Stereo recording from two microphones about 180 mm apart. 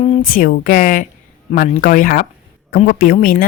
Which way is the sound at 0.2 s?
50° left (ahead or behind).